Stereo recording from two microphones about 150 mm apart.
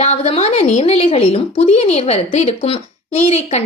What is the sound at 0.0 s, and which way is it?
Speech, 45° left (ahead or behind).